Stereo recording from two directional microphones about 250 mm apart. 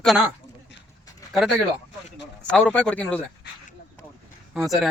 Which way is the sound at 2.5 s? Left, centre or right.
Centre.